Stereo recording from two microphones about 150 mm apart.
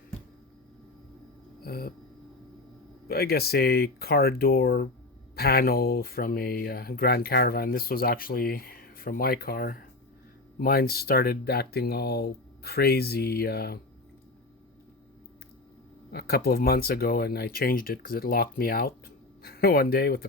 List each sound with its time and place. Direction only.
1.6 s a sound: 90° left
3.1 s speech: 90° left
16.1 s speech: 90° left